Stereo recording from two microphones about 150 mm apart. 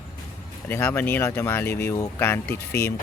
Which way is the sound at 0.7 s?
10° left (ahead or behind).